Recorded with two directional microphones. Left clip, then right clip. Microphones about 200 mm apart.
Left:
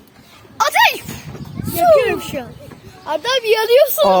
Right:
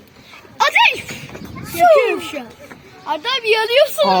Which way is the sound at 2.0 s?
25° left (ahead or behind).